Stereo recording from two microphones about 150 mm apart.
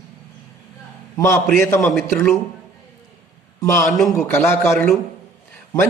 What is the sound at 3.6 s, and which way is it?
Speech, 20° left (ahead or behind).